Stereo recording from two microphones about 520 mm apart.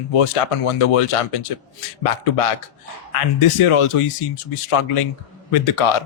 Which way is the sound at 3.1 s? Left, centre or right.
Left.